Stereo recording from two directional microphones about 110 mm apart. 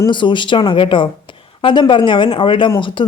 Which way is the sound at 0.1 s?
45° left (ahead or behind).